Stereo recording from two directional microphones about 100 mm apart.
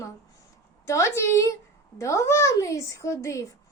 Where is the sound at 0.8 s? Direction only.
30° left (ahead or behind).